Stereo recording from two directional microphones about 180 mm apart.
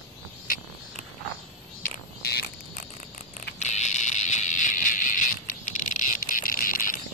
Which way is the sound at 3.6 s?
40° left (ahead or behind).